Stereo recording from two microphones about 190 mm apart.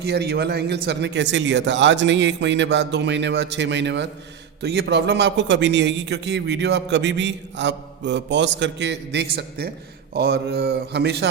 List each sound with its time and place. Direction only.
0.0 s a man's voice: 60° right (ahead or behind)